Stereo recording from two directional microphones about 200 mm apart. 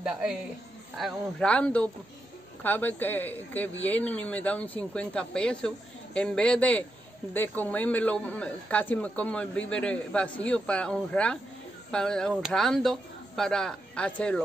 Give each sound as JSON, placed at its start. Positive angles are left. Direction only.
{"t": 0.0, "sound": "speech", "side_deg": -5}